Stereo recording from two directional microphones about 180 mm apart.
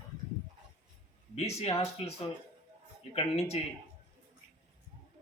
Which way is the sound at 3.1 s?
35° left (ahead or behind).